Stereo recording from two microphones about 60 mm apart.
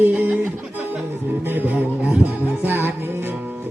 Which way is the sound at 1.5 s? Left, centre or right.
Right.